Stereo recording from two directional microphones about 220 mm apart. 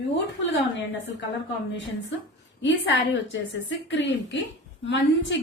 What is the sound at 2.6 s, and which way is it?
A woman's voice, 55° left (ahead or behind).